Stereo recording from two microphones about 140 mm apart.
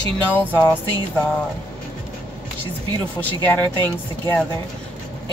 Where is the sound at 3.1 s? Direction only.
15° left (ahead or behind).